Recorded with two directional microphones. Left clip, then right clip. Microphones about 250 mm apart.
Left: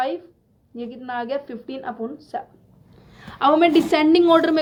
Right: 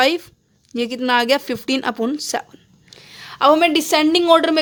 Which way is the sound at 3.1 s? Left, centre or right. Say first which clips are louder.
Right 4 dB; right.